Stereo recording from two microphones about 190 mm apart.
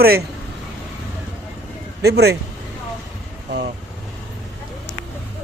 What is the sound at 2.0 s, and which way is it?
Speech, 60° right (ahead or behind).